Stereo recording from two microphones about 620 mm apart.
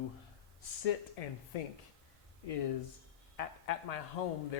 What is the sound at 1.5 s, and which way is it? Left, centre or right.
Speech, left.